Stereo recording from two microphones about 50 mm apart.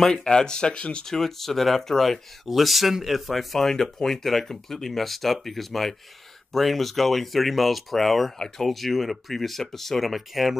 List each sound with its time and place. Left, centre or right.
0.0 s speech: centre
1.0 s speech: centre